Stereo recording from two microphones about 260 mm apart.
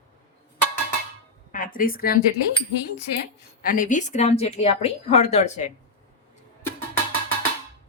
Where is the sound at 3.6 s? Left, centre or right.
Left.